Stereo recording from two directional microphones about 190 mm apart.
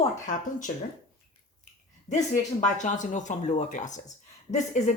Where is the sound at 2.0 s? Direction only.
40° left (ahead or behind).